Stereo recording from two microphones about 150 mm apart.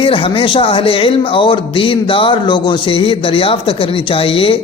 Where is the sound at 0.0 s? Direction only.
35° left (ahead or behind).